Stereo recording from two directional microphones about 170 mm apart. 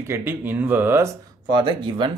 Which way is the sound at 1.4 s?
30° right (ahead or behind).